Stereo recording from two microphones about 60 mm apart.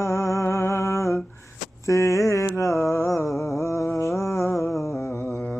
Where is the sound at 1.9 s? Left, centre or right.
Left.